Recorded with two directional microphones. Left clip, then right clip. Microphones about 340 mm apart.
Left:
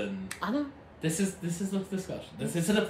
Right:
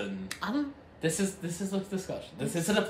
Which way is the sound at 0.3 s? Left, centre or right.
Centre.